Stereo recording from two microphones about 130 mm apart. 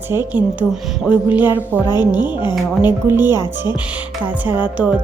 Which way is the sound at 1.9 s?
30° left (ahead or behind).